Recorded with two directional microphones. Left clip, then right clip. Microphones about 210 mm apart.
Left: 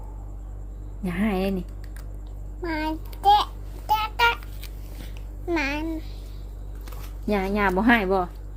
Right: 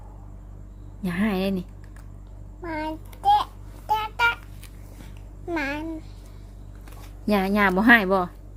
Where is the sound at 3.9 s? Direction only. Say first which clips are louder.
Left 1 dB; 10° right (ahead or behind).